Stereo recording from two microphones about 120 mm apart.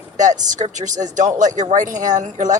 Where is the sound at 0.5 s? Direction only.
90° right.